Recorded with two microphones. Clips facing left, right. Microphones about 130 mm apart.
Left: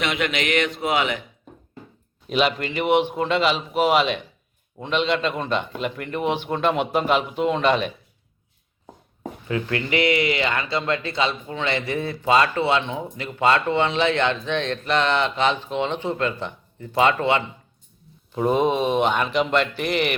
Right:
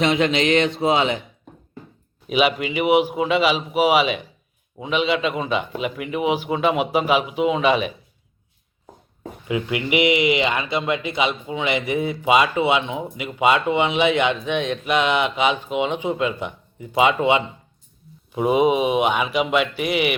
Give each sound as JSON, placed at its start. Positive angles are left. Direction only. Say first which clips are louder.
{"t": 0.0, "sound": "a sound", "louder": "right 6 dB", "side_deg": -30}
{"t": 2.2, "sound": "a man's voice", "louder": "right 2 dB", "side_deg": -5}
{"t": 9.5, "sound": "speech", "louder": "right 2 dB", "side_deg": -15}